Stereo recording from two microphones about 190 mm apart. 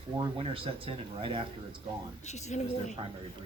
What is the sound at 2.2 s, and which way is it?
Speech, 40° left (ahead or behind).